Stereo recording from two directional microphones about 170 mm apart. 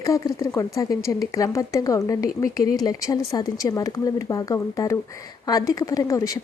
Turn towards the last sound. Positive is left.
turn(degrees=20)  # may be behind; listen again after turning